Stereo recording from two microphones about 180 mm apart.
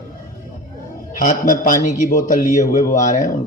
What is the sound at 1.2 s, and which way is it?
Speech, 45° left (ahead or behind).